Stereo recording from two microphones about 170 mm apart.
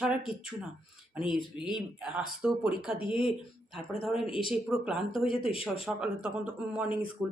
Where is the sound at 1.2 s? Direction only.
30° left (ahead or behind).